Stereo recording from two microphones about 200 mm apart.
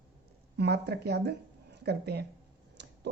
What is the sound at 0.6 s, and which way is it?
Speech, 55° right (ahead or behind).